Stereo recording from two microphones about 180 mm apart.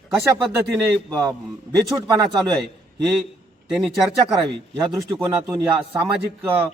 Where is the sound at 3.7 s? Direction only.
5° right (ahead or behind).